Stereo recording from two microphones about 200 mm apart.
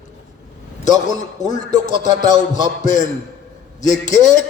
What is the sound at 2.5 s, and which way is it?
A man's voice, 40° left (ahead or behind).